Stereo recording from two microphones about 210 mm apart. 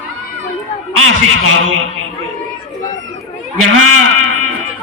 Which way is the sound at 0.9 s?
75° right (ahead or behind).